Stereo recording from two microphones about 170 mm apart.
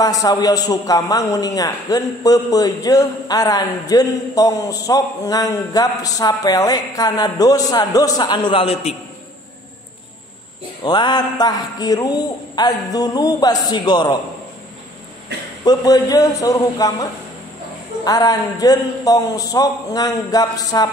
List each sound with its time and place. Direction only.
0.0 s a man's voice: 20° left (ahead or behind)
10.8 s a man's voice: 25° left (ahead or behind)
15.6 s a man's voice: 20° left (ahead or behind)